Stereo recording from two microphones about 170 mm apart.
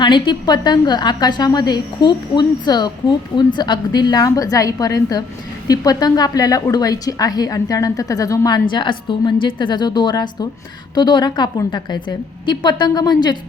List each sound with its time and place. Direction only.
0.0 s a woman's voice: 25° left (ahead or behind)